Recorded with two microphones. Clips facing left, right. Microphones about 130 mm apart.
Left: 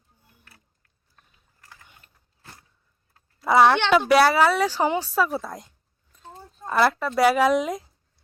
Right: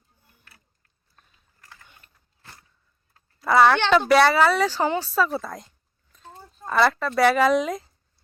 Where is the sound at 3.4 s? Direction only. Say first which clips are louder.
Even; 10° left (ahead or behind).